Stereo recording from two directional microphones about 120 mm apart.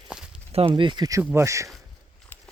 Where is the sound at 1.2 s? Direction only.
20° right (ahead or behind).